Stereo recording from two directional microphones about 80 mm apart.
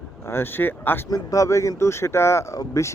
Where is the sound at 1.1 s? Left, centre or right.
Left.